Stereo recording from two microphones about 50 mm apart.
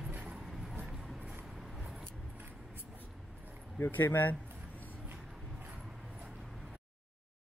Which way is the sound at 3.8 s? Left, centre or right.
Left.